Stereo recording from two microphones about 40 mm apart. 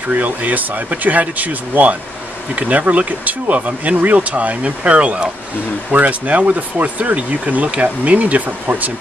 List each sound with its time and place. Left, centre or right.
0.1 s speech: right